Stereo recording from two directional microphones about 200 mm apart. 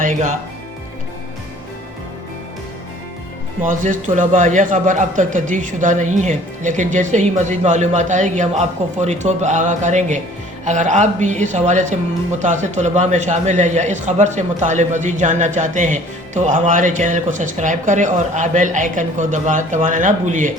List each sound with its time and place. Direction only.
3.6 s a man's voice: 40° right (ahead or behind)